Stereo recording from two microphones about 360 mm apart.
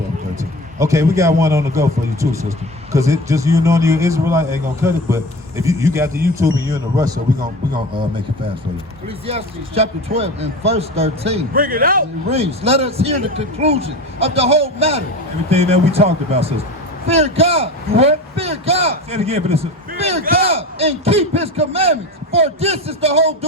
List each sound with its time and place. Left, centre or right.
0.8 s a man's voice: centre
2.9 s a man's voice: centre
9.2 s a man's voice: centre